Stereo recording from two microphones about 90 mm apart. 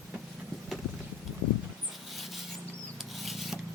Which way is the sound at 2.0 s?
Centre (ahead or behind).